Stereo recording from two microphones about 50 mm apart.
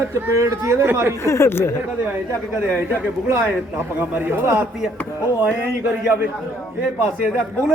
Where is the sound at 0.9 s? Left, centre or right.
Right.